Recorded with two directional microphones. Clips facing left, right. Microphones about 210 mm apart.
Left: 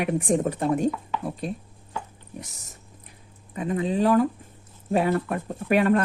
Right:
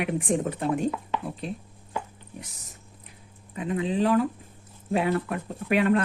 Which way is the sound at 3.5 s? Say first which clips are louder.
Left 2 dB; 40° left (ahead or behind).